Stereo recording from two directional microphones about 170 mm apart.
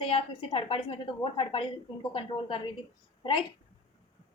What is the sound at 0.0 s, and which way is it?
A woman's voice, 30° left (ahead or behind).